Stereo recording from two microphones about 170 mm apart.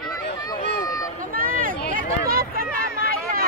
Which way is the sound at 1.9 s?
60° right (ahead or behind).